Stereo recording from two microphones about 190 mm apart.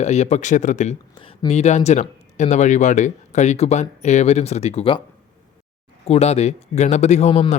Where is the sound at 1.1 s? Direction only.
25° left (ahead or behind).